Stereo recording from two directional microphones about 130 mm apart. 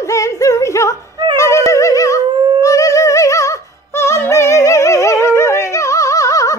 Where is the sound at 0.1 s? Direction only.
25° left (ahead or behind).